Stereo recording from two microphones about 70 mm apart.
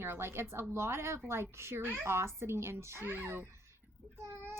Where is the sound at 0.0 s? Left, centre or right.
Right.